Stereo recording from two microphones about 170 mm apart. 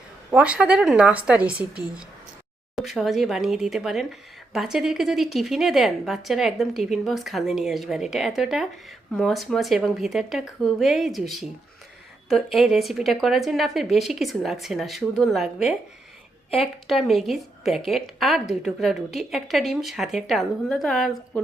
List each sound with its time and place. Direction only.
0.3 s a woman's voice: 5° right (ahead or behind)